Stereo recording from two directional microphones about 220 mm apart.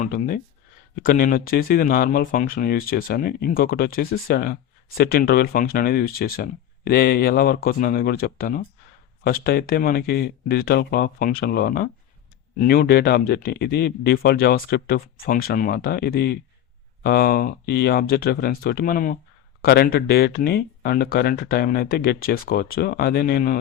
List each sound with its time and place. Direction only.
0.0 s speech: 40° left (ahead or behind)